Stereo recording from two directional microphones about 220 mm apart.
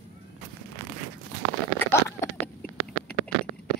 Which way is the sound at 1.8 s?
10° left (ahead or behind).